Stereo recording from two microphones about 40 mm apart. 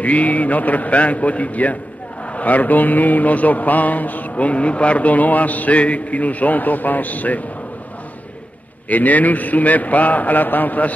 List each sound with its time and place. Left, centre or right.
0.0 s a man's voice: left
2.3 s mantra: left
8.8 s mantra: left